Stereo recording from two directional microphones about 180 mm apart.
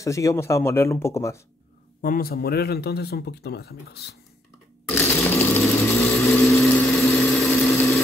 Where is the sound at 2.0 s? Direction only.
55° left (ahead or behind).